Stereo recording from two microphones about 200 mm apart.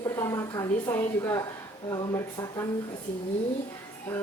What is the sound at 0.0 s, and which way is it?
A woman's voice, 15° left (ahead or behind).